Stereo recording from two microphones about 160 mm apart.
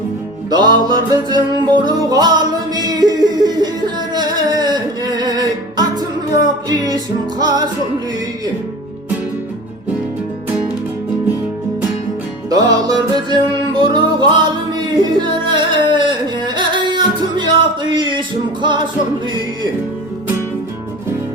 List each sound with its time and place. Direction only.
0.5 s music: 25° right (ahead or behind)
12.5 s music: 25° right (ahead or behind)